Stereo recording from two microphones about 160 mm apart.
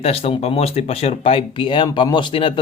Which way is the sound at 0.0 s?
35° left (ahead or behind).